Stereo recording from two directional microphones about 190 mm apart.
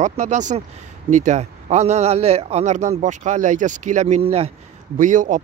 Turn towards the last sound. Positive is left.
turn(degrees=-40)  # may be behind; listen again after turning